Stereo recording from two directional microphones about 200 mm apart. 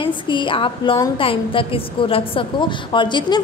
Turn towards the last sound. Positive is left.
turn(degrees=25)  # may be behind; listen again after turning